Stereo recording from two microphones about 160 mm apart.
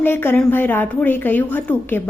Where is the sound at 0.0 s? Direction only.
15° left (ahead or behind).